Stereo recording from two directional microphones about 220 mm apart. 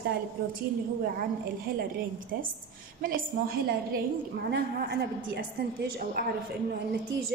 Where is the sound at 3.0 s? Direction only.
40° right (ahead or behind).